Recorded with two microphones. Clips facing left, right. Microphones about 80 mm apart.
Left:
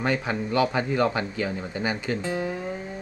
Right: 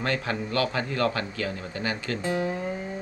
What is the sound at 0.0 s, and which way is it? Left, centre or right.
Speech, centre.